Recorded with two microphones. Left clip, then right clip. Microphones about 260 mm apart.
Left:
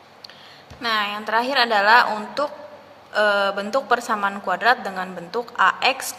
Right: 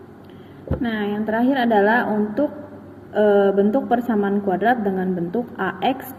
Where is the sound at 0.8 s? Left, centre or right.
Left.